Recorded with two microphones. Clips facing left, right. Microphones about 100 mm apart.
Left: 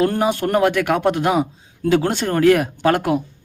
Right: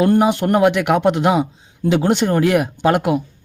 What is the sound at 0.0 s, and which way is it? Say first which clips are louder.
Speech: right 3 dB; 15° right (ahead or behind).